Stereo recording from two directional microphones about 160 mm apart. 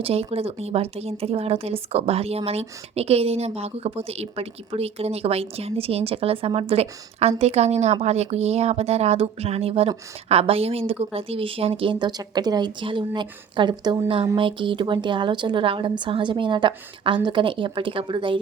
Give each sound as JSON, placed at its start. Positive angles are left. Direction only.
{"t": 0.0, "sound": "speech", "side_deg": -40}